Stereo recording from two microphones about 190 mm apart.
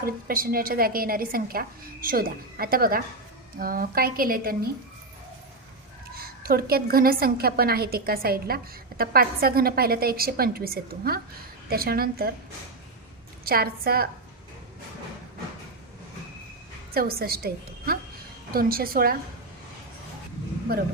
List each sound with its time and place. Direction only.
0.0 s a woman's voice: 50° right (ahead or behind)
6.1 s a woman's voice: 50° right (ahead or behind)
13.4 s a woman's voice: 55° right (ahead or behind)
16.9 s a woman's voice: 50° right (ahead or behind)